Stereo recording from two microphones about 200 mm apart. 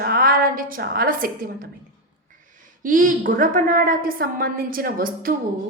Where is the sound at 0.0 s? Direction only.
50° right (ahead or behind).